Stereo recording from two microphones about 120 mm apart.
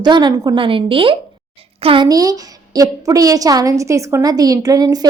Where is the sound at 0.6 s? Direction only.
45° right (ahead or behind).